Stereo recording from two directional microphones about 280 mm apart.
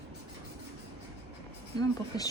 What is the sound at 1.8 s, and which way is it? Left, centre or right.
Speech, centre.